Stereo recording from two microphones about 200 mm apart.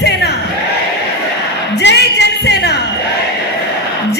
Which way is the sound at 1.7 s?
60° left (ahead or behind).